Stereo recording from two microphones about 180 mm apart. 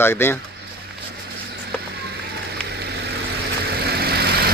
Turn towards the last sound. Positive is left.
turn(degrees=-60)  # may be behind; listen again after turning